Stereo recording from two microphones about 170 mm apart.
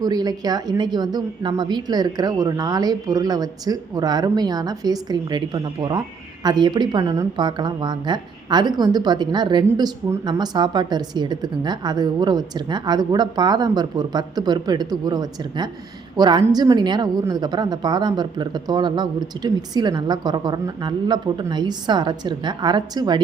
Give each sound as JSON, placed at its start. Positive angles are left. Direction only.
{"t": 0.0, "sound": "a woman's voice", "side_deg": -25}